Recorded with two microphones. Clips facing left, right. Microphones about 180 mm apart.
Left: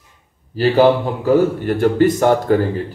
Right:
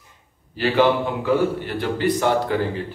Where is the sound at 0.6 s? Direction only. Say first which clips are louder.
Left 5 dB; 40° left (ahead or behind).